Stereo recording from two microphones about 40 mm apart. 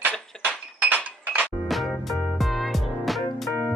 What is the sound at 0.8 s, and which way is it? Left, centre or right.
Chink, right.